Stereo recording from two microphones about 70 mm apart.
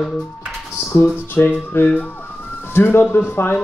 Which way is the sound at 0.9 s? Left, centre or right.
Left.